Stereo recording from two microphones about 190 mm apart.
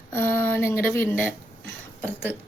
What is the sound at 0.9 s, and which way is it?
Speech, 10° left (ahead or behind).